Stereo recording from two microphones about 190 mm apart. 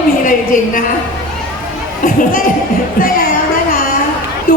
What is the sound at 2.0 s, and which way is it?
Speech, 45° left (ahead or behind).